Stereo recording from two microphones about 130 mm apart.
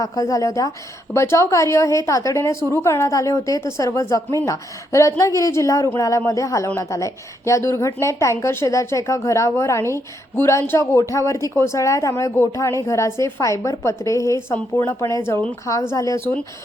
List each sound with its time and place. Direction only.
0.0 s a woman's voice: 25° left (ahead or behind)